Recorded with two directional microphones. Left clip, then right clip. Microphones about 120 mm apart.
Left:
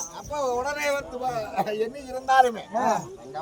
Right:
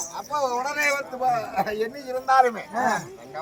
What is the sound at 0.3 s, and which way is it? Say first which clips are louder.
A man's voice: right 1 dB; 10° right (ahead or behind).